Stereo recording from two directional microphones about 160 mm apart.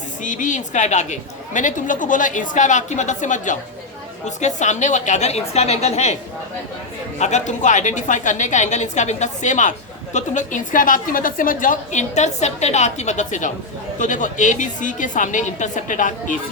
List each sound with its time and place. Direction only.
0.2 s a woman's voice: 50° left (ahead or behind)
7.2 s a woman's voice: 45° left (ahead or behind)